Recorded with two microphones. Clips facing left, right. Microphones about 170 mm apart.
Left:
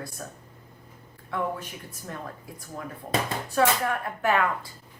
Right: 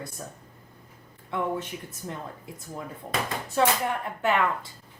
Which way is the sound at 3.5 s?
20° right (ahead or behind).